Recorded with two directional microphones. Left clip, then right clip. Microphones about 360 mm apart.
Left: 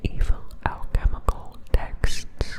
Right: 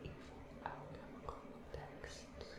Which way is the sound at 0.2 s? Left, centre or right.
Left.